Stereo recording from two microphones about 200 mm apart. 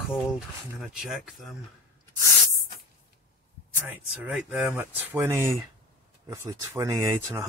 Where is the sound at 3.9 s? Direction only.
5° right (ahead or behind).